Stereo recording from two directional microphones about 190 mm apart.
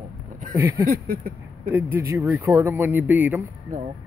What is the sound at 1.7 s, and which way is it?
Speech, 10° right (ahead or behind).